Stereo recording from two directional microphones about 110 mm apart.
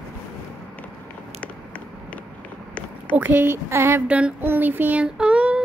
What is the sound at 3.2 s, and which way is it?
Speech, 15° right (ahead or behind).